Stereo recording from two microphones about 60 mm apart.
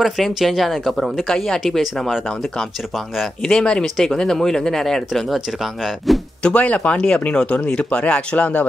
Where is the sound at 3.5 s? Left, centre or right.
Centre.